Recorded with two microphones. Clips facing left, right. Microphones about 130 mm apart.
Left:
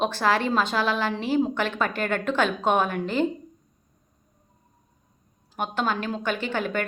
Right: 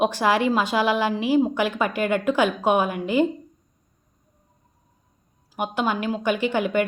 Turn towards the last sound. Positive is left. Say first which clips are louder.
# right 5 dB
turn(degrees=-15)  # may be behind; listen again after turning